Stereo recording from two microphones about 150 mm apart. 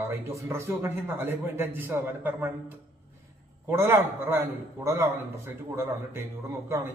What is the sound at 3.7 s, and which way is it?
A man's voice, 15° right (ahead or behind).